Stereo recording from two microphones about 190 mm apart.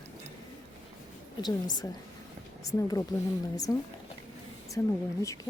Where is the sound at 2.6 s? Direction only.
20° left (ahead or behind).